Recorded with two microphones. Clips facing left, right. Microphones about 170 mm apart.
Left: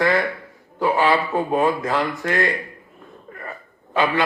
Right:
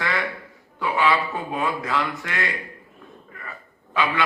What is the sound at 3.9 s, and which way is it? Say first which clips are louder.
Speech: left 4 dB; 40° left (ahead or behind).